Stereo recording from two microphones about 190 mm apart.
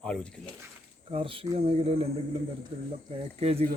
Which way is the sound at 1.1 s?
30° right (ahead or behind).